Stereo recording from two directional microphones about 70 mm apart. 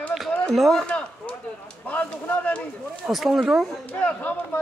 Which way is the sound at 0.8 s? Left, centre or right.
Centre.